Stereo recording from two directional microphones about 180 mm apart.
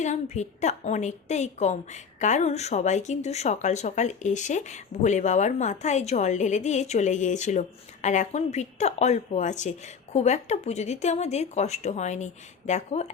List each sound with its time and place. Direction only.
0.0 s a woman's voice: 40° left (ahead or behind)